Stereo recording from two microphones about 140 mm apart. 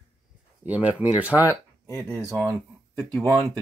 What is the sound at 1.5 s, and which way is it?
Speech, 25° right (ahead or behind).